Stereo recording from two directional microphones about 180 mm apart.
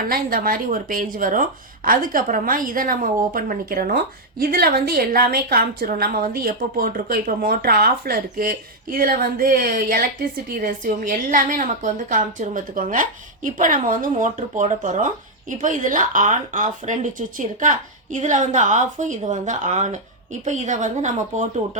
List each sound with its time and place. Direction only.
0.0 s speech: 55° right (ahead or behind)